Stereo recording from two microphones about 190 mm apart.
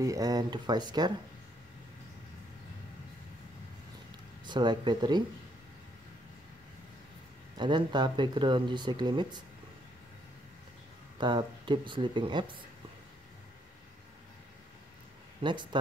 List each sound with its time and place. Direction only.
0.0 s speech: 20° right (ahead or behind)
4.5 s speech: 25° right (ahead or behind)
7.5 s speech: 25° right (ahead or behind)
11.1 s speech: 25° right (ahead or behind)
15.4 s speech: 25° right (ahead or behind)